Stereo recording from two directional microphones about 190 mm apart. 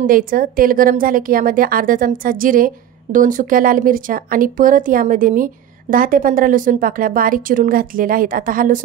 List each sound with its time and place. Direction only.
0.0 s a woman's voice: 50° right (ahead or behind)